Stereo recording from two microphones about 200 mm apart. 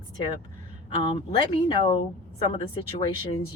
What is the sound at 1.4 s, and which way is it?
Speech, 25° left (ahead or behind).